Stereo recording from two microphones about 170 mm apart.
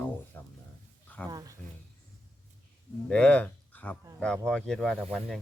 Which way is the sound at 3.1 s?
5° left (ahead or behind).